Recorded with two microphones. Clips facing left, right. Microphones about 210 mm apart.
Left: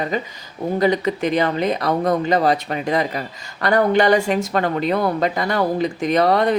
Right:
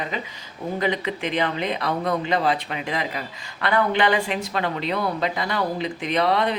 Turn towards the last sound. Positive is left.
turn(degrees=45)  # may be behind; listen again after turning